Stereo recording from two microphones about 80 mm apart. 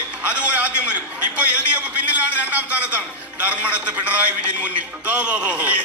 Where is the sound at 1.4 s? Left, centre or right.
Centre.